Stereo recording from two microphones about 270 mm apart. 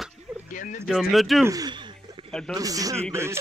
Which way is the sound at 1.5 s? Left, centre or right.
Centre.